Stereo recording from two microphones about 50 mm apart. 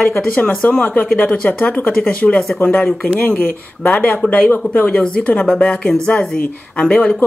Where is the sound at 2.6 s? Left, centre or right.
Left.